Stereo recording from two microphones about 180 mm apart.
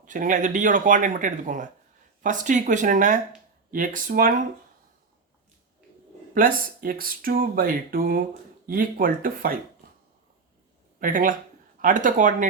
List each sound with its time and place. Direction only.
0.0 s speech: 45° right (ahead or behind)
6.3 s speech: 50° right (ahead or behind)
11.0 s speech: 50° right (ahead or behind)